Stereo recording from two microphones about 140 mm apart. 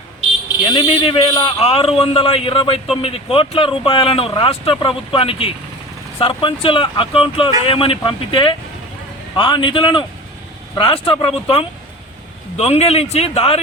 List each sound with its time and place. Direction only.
0.6 s a man's voice: 40° left (ahead or behind)